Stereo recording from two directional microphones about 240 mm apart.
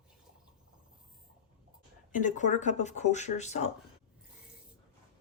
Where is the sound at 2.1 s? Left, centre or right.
Left.